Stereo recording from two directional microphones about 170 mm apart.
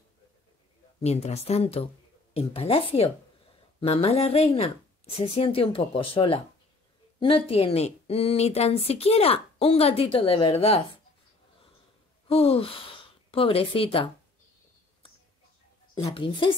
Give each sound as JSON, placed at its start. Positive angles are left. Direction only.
{"t": 1.0, "sound": "speech", "side_deg": 40}
{"t": 12.3, "sound": "a woman's voice", "side_deg": 35}
{"t": 15.9, "sound": "speech", "side_deg": 30}